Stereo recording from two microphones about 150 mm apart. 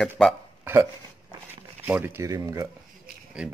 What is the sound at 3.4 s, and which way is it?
Speech, 5° right (ahead or behind).